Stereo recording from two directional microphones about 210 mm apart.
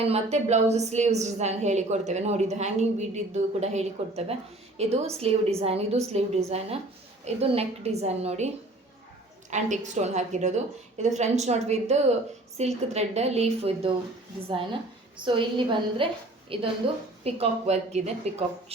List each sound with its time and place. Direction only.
0.0 s a woman's voice: 30° right (ahead or behind)
9.5 s a woman's voice: 35° right (ahead or behind)
15.2 s a woman's voice: 25° right (ahead or behind)